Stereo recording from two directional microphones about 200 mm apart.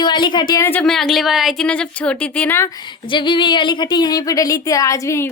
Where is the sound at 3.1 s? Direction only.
25° left (ahead or behind).